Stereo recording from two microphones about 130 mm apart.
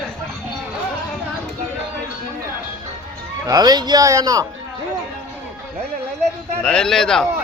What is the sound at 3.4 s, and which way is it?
Speech, 30° right (ahead or behind).